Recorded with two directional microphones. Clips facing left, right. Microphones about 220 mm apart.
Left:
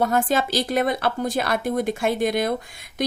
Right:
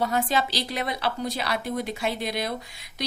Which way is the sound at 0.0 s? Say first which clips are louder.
Left 4 dB; 50° left (ahead or behind).